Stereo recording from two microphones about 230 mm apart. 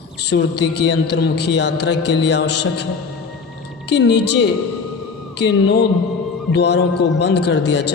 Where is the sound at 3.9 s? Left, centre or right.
Left.